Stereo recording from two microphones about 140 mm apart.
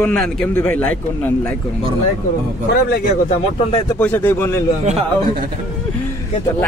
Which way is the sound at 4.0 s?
10° left (ahead or behind).